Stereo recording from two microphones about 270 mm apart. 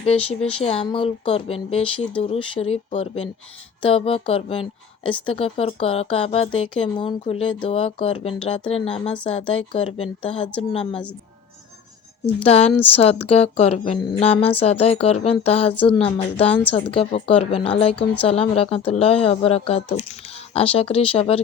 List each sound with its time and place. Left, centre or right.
0.0 s speech: left
8.9 s speech: centre
9.5 s speech: left
12.4 s speech: left
17.9 s speech: centre
18.3 s speech: left